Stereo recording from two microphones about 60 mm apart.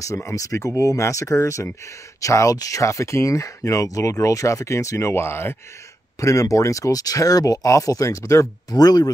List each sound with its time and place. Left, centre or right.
0.4 s speech: left
6.2 s speech: left
8.6 s speech: left